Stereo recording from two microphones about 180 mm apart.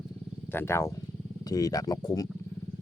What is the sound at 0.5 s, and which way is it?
Speech, 15° left (ahead or behind).